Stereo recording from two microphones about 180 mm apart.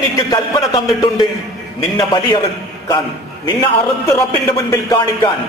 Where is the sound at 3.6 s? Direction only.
15° left (ahead or behind).